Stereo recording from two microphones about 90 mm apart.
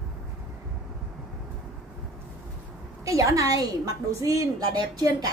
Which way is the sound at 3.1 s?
35° right (ahead or behind).